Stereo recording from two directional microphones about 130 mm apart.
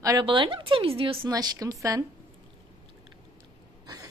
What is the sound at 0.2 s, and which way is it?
A woman's voice, 40° right (ahead or behind).